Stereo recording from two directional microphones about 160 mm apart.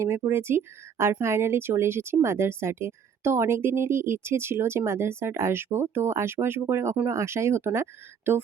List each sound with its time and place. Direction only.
0.0 s speech: 15° right (ahead or behind)